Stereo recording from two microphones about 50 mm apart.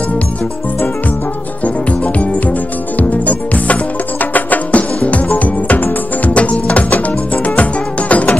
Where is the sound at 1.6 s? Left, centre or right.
Left.